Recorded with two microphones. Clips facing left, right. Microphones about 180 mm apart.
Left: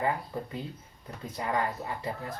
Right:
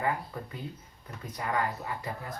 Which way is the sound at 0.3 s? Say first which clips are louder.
Left 3 dB; 30° left (ahead or behind).